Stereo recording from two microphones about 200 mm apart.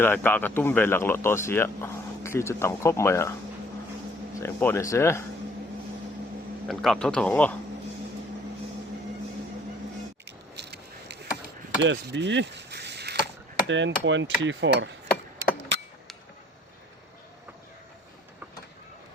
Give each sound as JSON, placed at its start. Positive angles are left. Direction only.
{"t": 0.0, "sound": "speech", "side_deg": 10}
{"t": 4.4, "sound": "speech", "side_deg": 10}
{"t": 6.7, "sound": "speech", "side_deg": 0}
{"t": 10.5, "sound": "a sound", "side_deg": -55}
{"t": 13.7, "sound": "hammer", "side_deg": -65}